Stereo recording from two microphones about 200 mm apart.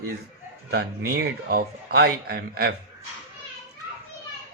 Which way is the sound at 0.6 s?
55° right (ahead or behind).